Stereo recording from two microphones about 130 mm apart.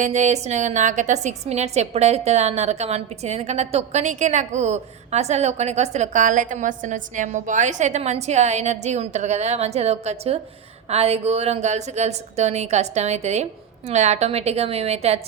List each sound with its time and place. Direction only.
0.0 s a woman's voice: 65° right (ahead or behind)